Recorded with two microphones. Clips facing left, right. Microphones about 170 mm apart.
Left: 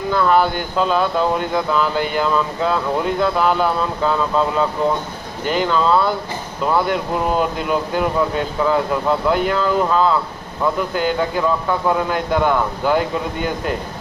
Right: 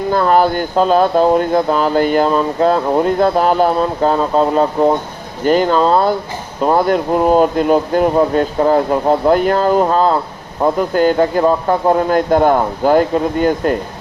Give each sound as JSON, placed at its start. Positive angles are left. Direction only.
{"t": 0.1, "sound": "speech", "side_deg": -45}